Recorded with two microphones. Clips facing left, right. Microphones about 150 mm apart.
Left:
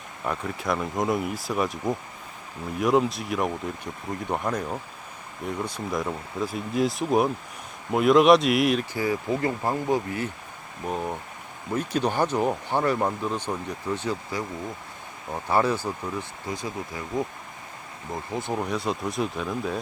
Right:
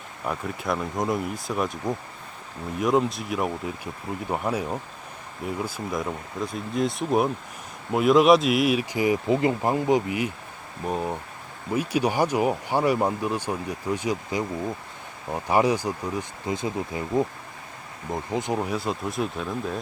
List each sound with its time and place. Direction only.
0.3 s speech: centre (ahead or behind); by 18.5 s 20° right (ahead or behind)
18.5 s speech: 5° right (ahead or behind)